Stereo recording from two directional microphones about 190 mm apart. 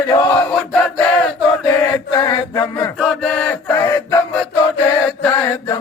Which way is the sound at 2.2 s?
20° left (ahead or behind).